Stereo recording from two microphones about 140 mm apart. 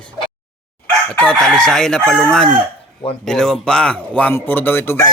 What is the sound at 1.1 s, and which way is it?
Chicken, 5° left (ahead or behind).